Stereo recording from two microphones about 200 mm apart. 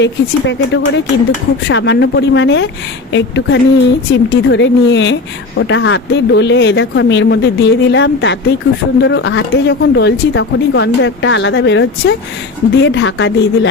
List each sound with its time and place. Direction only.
0.0 s speech: 65° left (ahead or behind)